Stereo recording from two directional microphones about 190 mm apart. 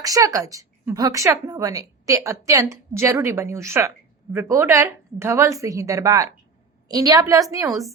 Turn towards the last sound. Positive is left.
turn(degrees=-15)  # may be behind; listen again after turning